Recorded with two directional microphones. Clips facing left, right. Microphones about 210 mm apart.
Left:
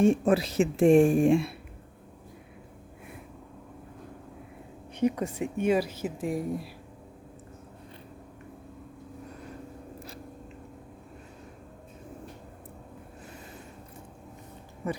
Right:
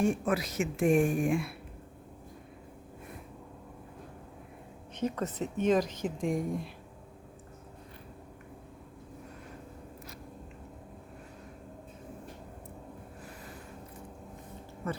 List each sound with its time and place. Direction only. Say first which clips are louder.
0.0 s a woman's voice: left 6 dB; 25° left (ahead or behind)
4.9 s speech: left 5 dB; 10° left (ahead or behind)
14.8 s speech: left 3 dB; 15° left (ahead or behind)